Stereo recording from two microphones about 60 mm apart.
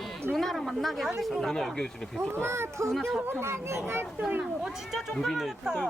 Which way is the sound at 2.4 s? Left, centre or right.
Right.